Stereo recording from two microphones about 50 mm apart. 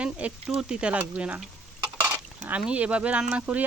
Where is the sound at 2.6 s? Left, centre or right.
Right.